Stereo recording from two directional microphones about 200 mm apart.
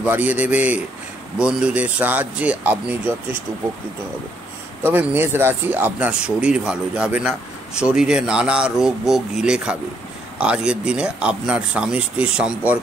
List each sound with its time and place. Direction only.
0.0 s speech: 10° right (ahead or behind)
4.8 s speech: 10° right (ahead or behind)